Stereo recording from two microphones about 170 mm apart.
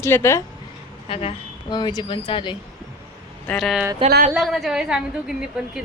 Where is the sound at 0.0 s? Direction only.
15° left (ahead or behind).